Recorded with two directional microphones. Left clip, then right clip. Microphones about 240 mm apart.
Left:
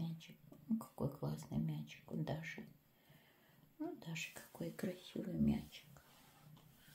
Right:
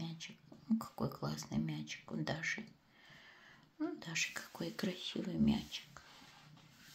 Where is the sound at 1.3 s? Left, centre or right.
Centre.